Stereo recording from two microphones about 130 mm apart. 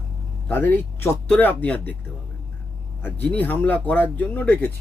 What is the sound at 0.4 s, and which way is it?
Speech, 15° left (ahead or behind).